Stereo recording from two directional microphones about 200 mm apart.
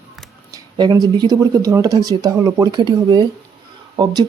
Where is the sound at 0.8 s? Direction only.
20° right (ahead or behind).